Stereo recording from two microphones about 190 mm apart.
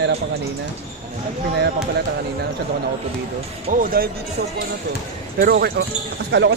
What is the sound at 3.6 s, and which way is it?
Speech, 45° right (ahead or behind).